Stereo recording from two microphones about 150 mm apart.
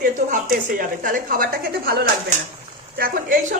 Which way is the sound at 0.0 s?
70° right (ahead or behind).